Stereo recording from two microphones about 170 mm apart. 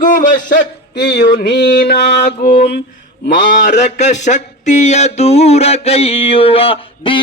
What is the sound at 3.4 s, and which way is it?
Mantra, 90° left.